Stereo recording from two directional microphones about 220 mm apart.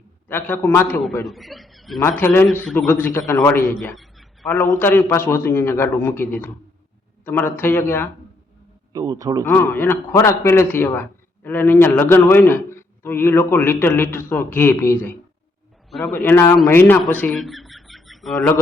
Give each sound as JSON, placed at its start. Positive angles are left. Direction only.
{"t": 0.3, "sound": "a man's voice", "side_deg": 10}
{"t": 3.8, "sound": "a sound", "side_deg": 0}
{"t": 4.6, "sound": "a man's voice", "side_deg": 15}
{"t": 8.9, "sound": "speech", "side_deg": -15}
{"t": 9.4, "sound": "a man's voice", "side_deg": 10}